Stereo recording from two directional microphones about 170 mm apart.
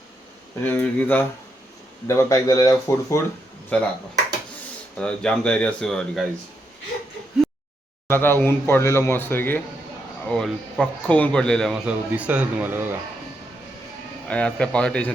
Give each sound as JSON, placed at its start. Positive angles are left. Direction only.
{"t": 0.6, "sound": "speech", "side_deg": 10}
{"t": 3.7, "sound": "speech", "side_deg": 10}
{"t": 4.9, "sound": "a man's voice", "side_deg": 5}
{"t": 8.0, "sound": "a man's voice", "side_deg": 15}
{"t": 14.3, "sound": "speech", "side_deg": 5}